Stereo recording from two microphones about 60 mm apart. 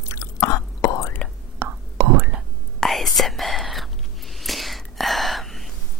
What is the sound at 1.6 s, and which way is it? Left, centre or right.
Whispering, right.